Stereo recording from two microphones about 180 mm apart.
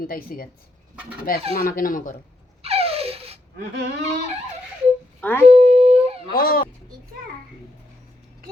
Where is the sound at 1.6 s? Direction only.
50° left (ahead or behind).